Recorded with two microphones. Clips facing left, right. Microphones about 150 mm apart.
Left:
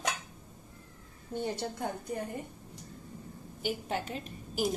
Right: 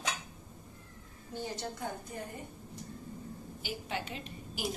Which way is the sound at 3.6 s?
45° left (ahead or behind).